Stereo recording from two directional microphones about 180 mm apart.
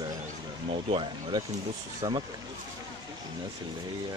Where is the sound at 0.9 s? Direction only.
30° right (ahead or behind).